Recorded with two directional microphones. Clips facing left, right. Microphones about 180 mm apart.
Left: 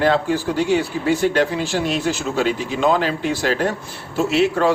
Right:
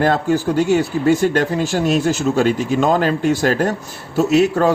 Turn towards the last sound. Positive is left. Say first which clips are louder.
# right 3 dB
turn(degrees=-40)  # may be behind; listen again after turning